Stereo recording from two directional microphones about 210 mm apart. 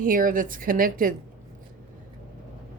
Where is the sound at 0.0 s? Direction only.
40° right (ahead or behind).